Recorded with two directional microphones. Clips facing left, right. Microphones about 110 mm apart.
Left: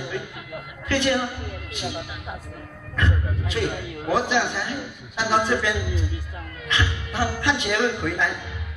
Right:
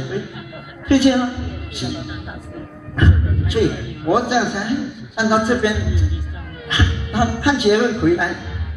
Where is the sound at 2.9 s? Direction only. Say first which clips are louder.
Right 7 dB; 15° right (ahead or behind).